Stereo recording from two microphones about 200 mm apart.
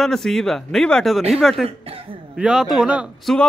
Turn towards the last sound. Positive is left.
turn(degrees=-5)  # may be behind; listen again after turning